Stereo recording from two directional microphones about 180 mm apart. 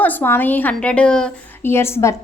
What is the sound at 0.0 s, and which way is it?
A woman's voice, 10° left (ahead or behind).